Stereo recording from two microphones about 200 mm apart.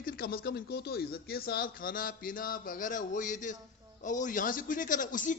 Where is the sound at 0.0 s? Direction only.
45° left (ahead or behind).